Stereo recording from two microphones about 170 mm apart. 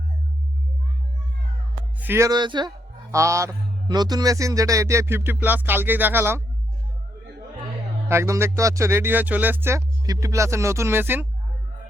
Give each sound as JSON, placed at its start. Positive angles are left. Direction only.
{"t": 2.0, "sound": "speech", "side_deg": -15}
{"t": 8.0, "sound": "speech", "side_deg": -15}